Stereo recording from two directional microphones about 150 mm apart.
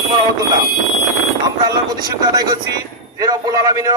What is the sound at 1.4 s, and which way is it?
Speech, 25° right (ahead or behind).